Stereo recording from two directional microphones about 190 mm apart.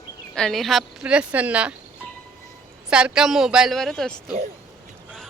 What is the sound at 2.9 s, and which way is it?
A woman's voice, 5° right (ahead or behind).